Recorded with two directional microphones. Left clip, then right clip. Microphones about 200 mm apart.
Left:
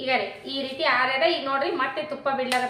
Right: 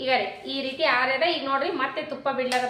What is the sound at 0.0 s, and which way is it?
Speech, 20° right (ahead or behind).